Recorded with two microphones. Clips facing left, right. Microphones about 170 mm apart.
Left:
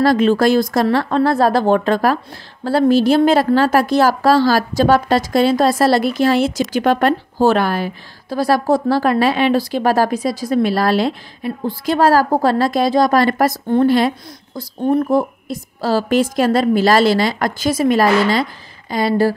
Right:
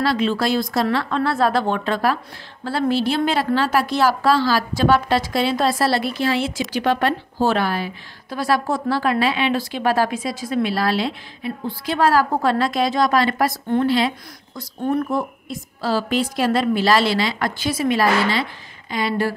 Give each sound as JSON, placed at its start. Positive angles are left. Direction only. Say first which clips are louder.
{"t": 0.0, "sound": "a woman's voice", "louder": "left 7 dB", "side_deg": 45}
{"t": 14.9, "sound": "speech", "louder": "left 6 dB", "side_deg": 35}